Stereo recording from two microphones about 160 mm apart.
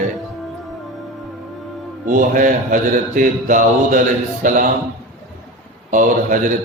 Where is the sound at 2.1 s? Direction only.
55° right (ahead or behind).